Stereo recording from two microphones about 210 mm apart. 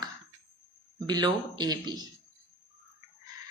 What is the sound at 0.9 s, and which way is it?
Speech, 20° right (ahead or behind).